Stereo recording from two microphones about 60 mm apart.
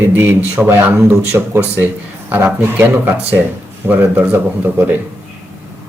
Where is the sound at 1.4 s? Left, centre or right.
Right.